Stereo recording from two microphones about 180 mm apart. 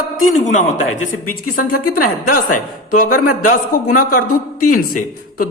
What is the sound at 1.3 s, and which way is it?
A man's voice, 50° left (ahead or behind).